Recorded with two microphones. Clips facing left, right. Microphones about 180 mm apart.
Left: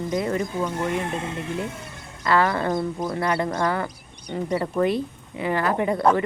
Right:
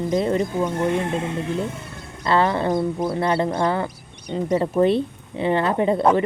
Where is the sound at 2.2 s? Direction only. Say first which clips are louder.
Right 2 dB; 25° right (ahead or behind).